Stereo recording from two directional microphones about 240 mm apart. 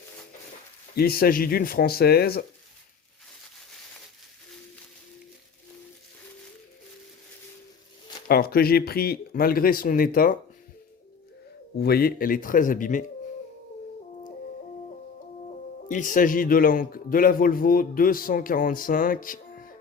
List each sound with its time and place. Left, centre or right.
0.9 s a man's voice: left
8.3 s a man's voice: left
11.8 s a man's voice: left
15.9 s a man's voice: left